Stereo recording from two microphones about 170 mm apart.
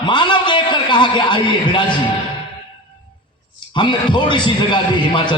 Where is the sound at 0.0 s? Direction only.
25° left (ahead or behind).